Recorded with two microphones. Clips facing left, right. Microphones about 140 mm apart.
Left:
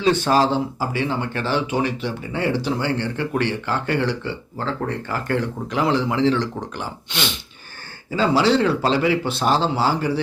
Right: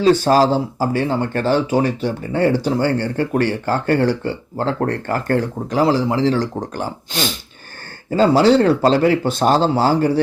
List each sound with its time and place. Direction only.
0.0 s speech: 40° right (ahead or behind)